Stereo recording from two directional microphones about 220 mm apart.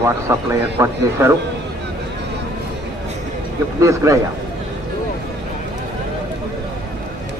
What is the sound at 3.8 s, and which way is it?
Speech, 15° right (ahead or behind).